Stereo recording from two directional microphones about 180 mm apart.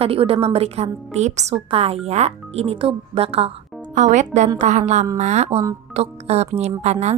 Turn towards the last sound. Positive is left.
turn(degrees=-40)  # may be behind; listen again after turning